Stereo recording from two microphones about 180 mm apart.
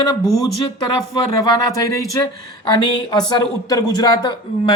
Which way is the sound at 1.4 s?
20° left (ahead or behind).